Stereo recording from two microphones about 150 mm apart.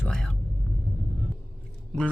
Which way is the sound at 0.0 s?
5° left (ahead or behind).